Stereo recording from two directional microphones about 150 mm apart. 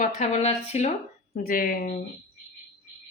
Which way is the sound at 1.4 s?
75° left (ahead or behind).